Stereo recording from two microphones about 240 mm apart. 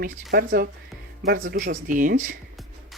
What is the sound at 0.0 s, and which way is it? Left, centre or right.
Speech, right.